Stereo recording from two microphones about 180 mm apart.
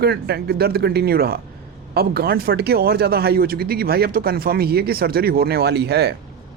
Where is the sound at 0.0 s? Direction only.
65° right (ahead or behind).